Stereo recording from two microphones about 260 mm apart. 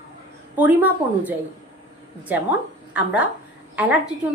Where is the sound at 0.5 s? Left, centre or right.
Centre.